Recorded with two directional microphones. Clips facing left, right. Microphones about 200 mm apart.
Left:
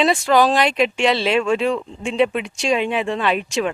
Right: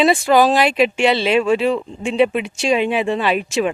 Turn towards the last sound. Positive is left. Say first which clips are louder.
# right 2 dB
turn(degrees=-5)  # may be behind; listen again after turning